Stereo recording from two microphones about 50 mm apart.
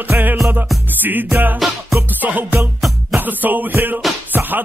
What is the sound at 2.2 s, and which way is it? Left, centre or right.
Music, right.